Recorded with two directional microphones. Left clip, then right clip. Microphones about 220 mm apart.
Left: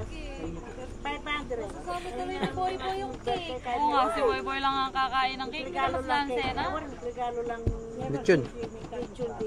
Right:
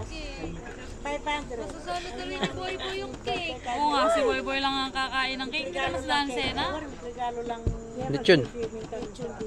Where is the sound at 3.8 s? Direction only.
25° right (ahead or behind).